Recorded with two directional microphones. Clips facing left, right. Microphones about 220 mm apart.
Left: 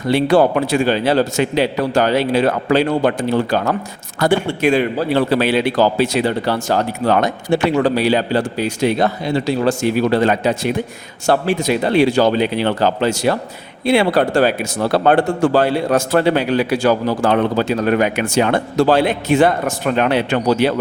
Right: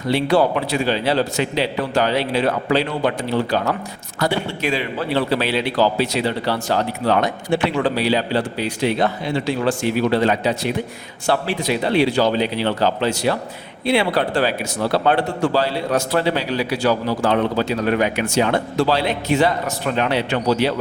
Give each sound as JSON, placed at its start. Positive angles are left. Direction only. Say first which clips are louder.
{"t": 0.1, "sound": "speech", "louder": "left 4 dB", "side_deg": 50}